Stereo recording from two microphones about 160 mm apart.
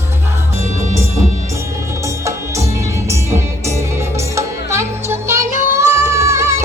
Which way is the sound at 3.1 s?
15° right (ahead or behind).